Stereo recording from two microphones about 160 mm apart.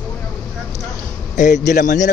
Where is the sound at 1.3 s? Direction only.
50° left (ahead or behind).